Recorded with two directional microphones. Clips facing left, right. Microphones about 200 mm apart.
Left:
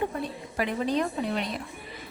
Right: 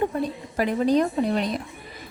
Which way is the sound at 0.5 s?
40° right (ahead or behind).